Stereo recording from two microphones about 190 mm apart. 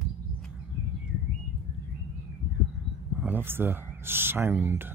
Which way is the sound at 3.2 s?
10° right (ahead or behind).